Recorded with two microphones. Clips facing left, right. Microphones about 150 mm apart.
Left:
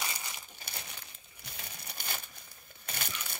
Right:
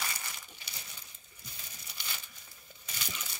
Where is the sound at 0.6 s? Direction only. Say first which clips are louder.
Left 5 dB; 60° left (ahead or behind).